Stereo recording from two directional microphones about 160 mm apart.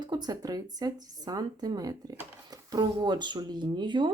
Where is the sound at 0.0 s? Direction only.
25° right (ahead or behind).